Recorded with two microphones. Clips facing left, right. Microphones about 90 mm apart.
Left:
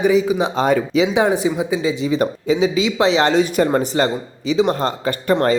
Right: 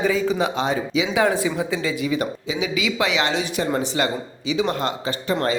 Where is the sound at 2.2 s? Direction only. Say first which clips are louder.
Left 8 dB; 35° left (ahead or behind).